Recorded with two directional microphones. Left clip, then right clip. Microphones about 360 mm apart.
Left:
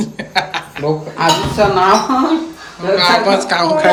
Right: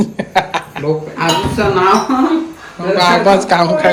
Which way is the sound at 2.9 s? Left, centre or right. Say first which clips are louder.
Right 2 dB; centre.